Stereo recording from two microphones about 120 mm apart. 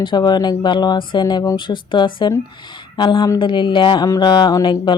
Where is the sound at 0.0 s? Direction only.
40° left (ahead or behind).